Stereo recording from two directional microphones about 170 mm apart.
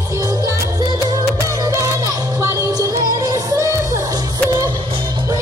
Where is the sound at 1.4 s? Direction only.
20° right (ahead or behind).